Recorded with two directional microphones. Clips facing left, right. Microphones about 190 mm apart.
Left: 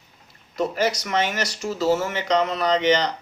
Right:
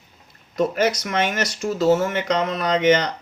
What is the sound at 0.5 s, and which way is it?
Speech, 50° right (ahead or behind).